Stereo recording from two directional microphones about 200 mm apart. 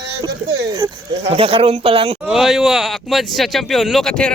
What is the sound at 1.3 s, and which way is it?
Speech, 25° right (ahead or behind).